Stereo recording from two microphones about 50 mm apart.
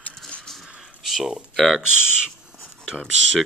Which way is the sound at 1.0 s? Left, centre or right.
Centre.